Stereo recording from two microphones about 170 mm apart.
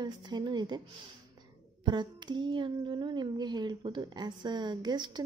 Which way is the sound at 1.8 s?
25° right (ahead or behind).